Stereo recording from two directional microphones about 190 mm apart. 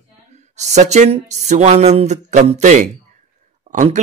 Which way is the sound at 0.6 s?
35° right (ahead or behind).